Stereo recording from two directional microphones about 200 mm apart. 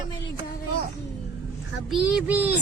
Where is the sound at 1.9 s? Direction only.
5° right (ahead or behind).